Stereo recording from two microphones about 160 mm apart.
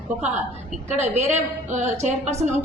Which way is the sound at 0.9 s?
45° right (ahead or behind).